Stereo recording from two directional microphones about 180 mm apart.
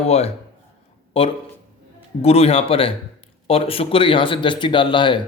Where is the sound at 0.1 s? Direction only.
35° left (ahead or behind).